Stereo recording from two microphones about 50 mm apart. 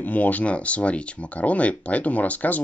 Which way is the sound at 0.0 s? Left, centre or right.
Left.